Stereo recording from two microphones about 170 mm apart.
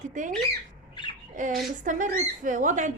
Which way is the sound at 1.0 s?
30° left (ahead or behind).